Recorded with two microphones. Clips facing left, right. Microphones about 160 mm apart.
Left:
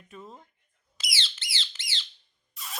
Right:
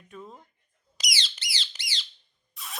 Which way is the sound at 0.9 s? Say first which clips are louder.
Right 2 dB; 15° right (ahead or behind).